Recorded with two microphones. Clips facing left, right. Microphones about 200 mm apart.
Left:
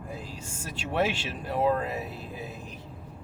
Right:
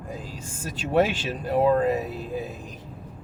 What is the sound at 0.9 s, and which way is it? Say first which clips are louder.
Speech: right 6 dB; 45° right (ahead or behind).